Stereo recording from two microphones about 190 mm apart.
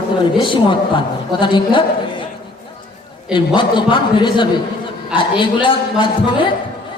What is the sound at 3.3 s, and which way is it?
A man's voice, 25° left (ahead or behind).